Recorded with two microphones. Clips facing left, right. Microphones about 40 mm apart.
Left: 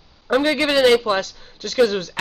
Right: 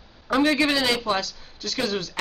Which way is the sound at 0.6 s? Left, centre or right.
Left.